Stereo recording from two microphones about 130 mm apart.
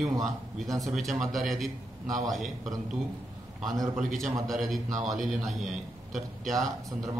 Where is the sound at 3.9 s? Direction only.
Centre (ahead or behind).